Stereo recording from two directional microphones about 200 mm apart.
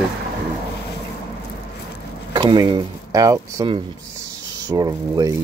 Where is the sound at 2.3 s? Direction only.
20° right (ahead or behind).